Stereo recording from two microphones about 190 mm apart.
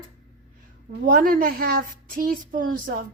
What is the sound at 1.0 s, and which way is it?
Speech, 45° right (ahead or behind).